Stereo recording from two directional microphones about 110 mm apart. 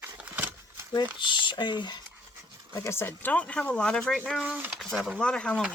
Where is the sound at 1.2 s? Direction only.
45° left (ahead or behind).